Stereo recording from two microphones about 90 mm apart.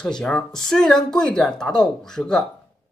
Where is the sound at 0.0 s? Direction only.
10° left (ahead or behind).